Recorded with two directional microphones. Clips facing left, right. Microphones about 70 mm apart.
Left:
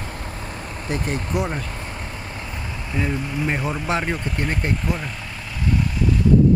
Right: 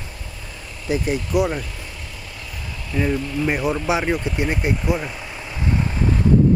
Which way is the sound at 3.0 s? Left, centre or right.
Centre.